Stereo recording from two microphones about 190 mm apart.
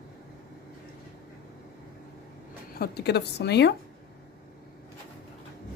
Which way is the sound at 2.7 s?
55° left (ahead or behind).